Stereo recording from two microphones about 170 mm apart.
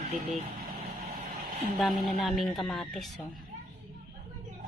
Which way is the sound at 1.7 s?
Centre (ahead or behind).